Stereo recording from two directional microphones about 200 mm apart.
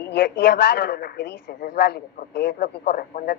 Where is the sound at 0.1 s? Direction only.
55° left (ahead or behind).